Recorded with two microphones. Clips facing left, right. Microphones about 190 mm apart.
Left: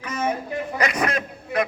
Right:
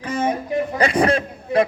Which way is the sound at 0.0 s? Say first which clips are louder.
Right 4 dB; 30° right (ahead or behind).